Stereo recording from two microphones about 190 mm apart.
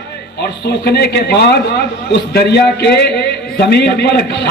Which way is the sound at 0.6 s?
60° left (ahead or behind).